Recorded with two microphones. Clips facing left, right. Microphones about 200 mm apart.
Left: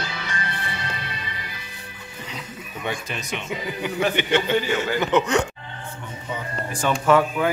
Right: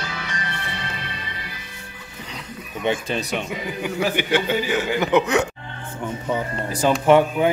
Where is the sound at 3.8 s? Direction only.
Centre (ahead or behind).